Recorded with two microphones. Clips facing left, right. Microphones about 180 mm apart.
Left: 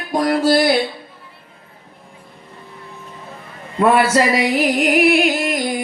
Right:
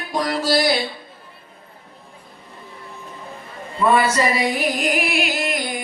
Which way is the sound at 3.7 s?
75° left (ahead or behind).